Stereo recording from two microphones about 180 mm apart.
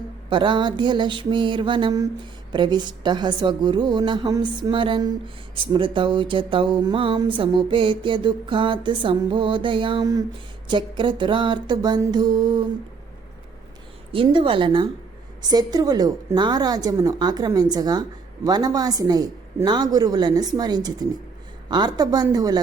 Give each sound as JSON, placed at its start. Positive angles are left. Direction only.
{"t": 0.3, "sound": "speech", "side_deg": -25}
{"t": 14.1, "sound": "speech", "side_deg": -30}